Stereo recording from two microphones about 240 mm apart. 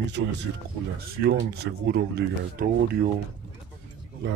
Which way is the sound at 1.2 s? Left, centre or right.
Right.